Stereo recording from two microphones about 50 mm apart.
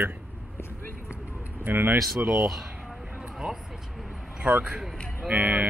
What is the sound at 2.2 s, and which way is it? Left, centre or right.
Speech, right.